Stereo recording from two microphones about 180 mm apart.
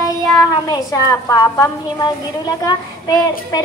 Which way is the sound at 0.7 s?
20° left (ahead or behind).